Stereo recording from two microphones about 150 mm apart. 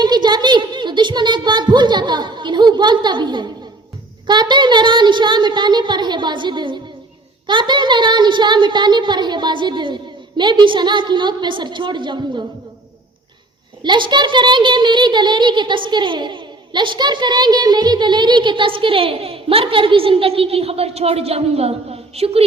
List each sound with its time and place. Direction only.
0.0 s a woman's voice: 30° right (ahead or behind)
13.8 s a child's voice: 30° right (ahead or behind)